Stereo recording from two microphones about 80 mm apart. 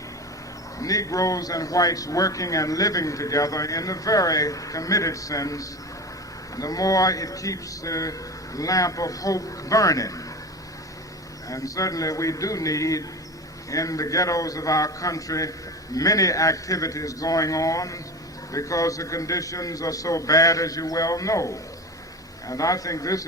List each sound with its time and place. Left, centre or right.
0.8 s speech: left
11.4 s speech: left